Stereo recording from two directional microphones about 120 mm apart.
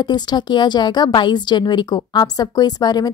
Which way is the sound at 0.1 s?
40° left (ahead or behind).